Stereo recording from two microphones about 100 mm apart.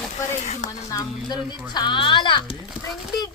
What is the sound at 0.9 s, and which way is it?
A child's voice, 40° left (ahead or behind).